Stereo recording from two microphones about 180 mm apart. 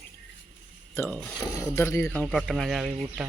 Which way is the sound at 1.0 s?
15° left (ahead or behind).